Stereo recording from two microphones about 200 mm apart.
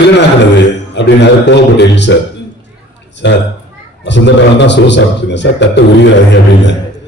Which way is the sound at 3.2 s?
60° left (ahead or behind).